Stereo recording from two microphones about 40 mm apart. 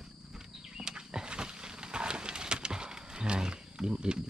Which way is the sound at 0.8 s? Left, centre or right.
Centre.